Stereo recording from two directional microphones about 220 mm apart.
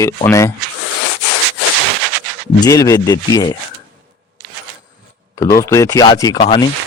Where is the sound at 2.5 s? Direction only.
15° left (ahead or behind).